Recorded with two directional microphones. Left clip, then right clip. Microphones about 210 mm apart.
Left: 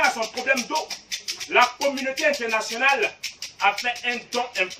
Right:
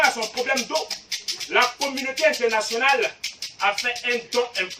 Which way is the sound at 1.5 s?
10° right (ahead or behind).